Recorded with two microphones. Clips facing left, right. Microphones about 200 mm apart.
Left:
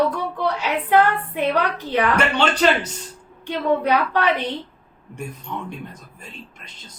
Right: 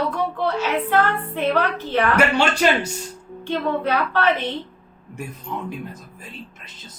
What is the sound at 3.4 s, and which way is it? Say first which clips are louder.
A woman's voice: left 2 dB; 15° left (ahead or behind).